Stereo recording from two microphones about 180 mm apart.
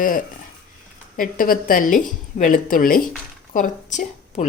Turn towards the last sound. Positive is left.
turn(degrees=45)  # may be behind; listen again after turning